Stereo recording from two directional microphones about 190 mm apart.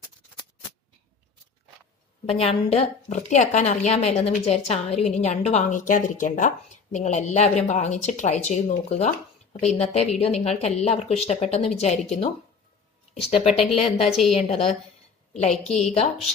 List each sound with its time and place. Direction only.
2.2 s a woman's voice: 30° left (ahead or behind)
13.5 s speech: centre (ahead or behind)
13.7 s a woman's voice: 30° left (ahead or behind)
14.0 s speech: centre (ahead or behind)
14.3 s a woman's voice: 35° left (ahead or behind)